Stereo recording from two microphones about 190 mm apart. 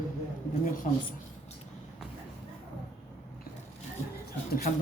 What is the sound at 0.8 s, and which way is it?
Speech, 40° left (ahead or behind).